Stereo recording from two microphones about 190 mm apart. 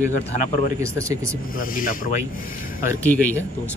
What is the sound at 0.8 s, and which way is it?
Speech, 15° right (ahead or behind).